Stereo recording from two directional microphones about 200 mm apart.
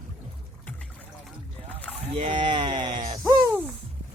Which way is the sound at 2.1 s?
25° right (ahead or behind).